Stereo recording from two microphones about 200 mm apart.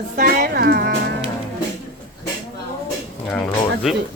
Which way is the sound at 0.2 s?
50° right (ahead or behind).